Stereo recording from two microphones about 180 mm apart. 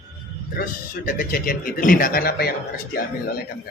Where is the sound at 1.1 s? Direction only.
55° left (ahead or behind).